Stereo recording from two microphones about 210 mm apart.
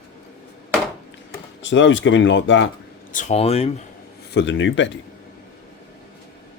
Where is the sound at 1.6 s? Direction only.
60° left (ahead or behind).